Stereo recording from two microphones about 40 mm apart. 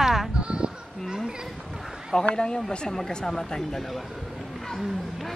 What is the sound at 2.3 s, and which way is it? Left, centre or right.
Speech, centre.